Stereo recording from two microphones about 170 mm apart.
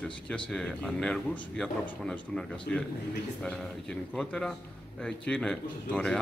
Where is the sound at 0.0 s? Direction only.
5° left (ahead or behind).